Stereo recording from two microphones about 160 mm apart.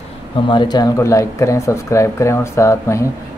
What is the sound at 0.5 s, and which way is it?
Speech, 30° left (ahead or behind).